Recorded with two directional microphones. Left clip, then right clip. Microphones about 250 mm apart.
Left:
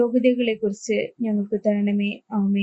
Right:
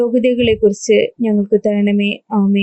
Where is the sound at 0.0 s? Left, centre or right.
Right.